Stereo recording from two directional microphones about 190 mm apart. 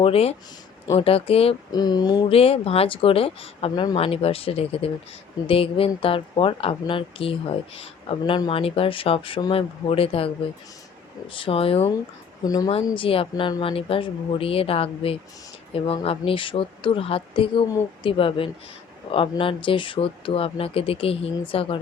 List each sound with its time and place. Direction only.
0.0 s speech: 30° left (ahead or behind)
1.8 s speech: 20° left (ahead or behind)
2.3 s speech: 30° left (ahead or behind)
12.4 s speech: 20° left (ahead or behind)